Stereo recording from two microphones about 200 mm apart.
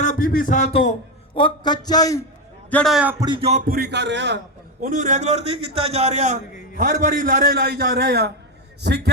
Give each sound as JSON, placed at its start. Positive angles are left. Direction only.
{"t": 0.0, "sound": "a sound", "side_deg": 40}
{"t": 1.4, "sound": "a man's voice", "side_deg": 25}
{"t": 2.6, "sound": "a man's voice", "side_deg": 5}
{"t": 3.2, "sound": "music", "side_deg": -25}
{"t": 3.7, "sound": "speech", "side_deg": -50}
{"t": 4.8, "sound": "a man's voice", "side_deg": -40}